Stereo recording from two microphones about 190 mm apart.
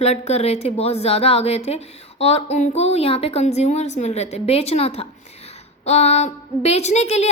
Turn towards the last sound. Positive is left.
turn(degrees=35)  # may be behind; listen again after turning